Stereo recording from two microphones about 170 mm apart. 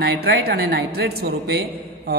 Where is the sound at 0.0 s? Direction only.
70° right (ahead or behind).